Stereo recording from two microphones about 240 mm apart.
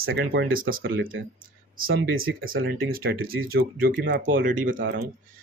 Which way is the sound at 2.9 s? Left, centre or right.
Right.